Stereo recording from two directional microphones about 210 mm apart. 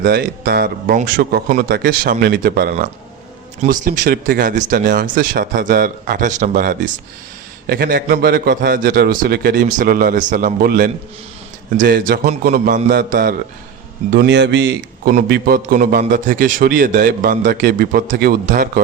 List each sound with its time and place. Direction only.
0.0 s a man's voice: 45° right (ahead or behind)
14.1 s a man's voice: 55° right (ahead or behind)
15.1 s a man's voice: 45° right (ahead or behind)